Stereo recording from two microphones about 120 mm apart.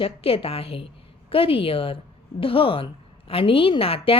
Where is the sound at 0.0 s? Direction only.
50° left (ahead or behind).